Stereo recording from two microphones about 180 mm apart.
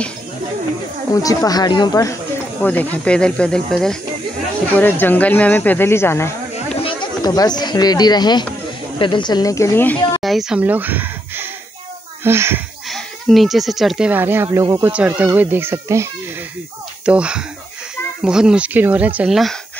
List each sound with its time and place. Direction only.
1.1 s speech: 20° left (ahead or behind)
2.6 s speech: 10° left (ahead or behind)
6.8 s speech: 25° left (ahead or behind)
10.2 s speech: centre (ahead or behind)
12.9 s speech: centre (ahead or behind)